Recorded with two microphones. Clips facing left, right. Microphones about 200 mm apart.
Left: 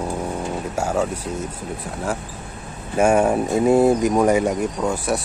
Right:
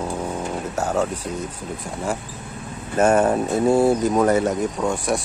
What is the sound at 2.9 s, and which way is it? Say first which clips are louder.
Speech: even; 10° left (ahead or behind).